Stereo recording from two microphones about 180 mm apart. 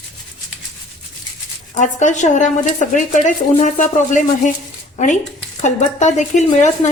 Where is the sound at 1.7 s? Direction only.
40° left (ahead or behind).